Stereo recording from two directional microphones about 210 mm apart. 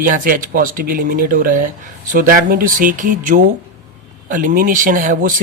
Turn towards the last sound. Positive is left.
turn(degrees=-40)  # may be behind; listen again after turning